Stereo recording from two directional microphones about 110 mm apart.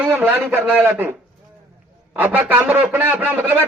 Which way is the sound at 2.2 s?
15° right (ahead or behind).